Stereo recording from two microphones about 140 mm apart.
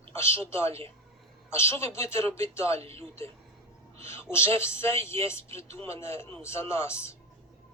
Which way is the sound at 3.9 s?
20° left (ahead or behind).